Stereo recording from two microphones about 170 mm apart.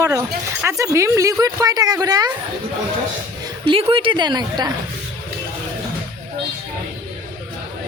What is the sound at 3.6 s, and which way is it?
A woman's voice, 30° right (ahead or behind).